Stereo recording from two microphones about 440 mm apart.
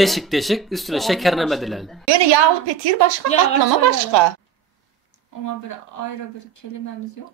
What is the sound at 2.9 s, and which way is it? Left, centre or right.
Speech, right.